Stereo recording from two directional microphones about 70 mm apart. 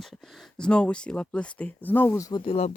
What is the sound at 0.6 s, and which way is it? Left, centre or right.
Speech, centre.